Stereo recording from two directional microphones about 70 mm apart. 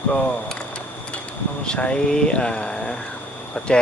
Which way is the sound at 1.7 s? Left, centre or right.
Centre.